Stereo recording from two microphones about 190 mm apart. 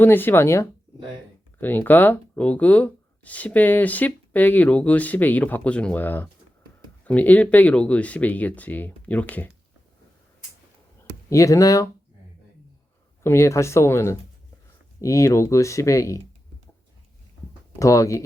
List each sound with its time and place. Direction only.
0.0 s speech: 10° left (ahead or behind)
11.3 s speech: 15° left (ahead or behind)
13.2 s speech: 15° left (ahead or behind)
17.7 s speech: 15° left (ahead or behind)